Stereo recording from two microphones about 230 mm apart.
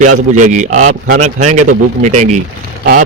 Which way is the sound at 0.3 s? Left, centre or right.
Right.